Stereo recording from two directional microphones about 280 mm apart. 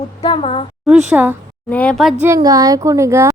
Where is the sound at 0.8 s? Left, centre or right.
Centre.